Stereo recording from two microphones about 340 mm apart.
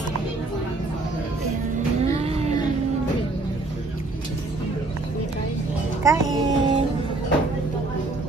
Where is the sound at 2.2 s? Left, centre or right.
Centre.